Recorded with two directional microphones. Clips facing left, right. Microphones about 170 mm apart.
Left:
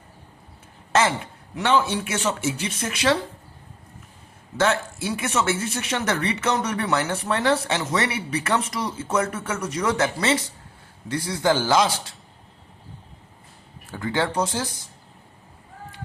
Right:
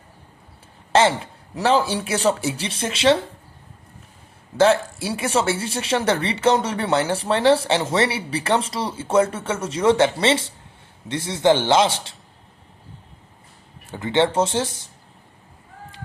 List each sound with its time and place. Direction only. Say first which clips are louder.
0.9 s a man's voice: right 4 dB; 30° right (ahead or behind)
4.5 s speech: right 6 dB; 30° right (ahead or behind)
13.8 s speech: right 5 dB; 20° right (ahead or behind)